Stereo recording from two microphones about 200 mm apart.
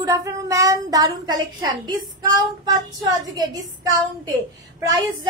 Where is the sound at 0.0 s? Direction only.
15° right (ahead or behind).